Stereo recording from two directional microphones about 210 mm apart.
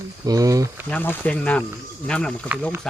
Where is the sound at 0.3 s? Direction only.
15° right (ahead or behind).